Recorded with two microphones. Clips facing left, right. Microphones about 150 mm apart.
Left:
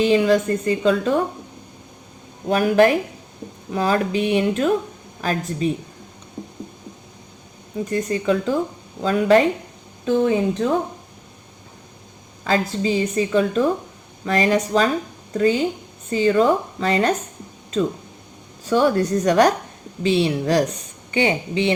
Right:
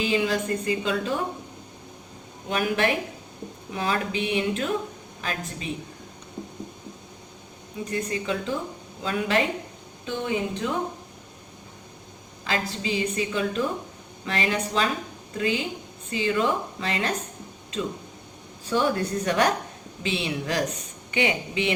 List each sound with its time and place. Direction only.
0.0 s a woman's voice: 40° left (ahead or behind)
2.5 s a woman's voice: 40° left (ahead or behind)
7.9 s a woman's voice: 40° left (ahead or behind)
12.5 s a woman's voice: 40° left (ahead or behind)
18.8 s a woman's voice: 40° left (ahead or behind)